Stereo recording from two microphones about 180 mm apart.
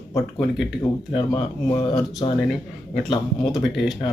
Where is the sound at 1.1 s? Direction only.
25° left (ahead or behind).